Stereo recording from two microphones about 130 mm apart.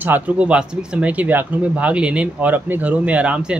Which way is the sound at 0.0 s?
10° right (ahead or behind).